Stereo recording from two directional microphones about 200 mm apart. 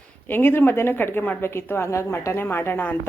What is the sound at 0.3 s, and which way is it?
A woman's voice, 10° left (ahead or behind).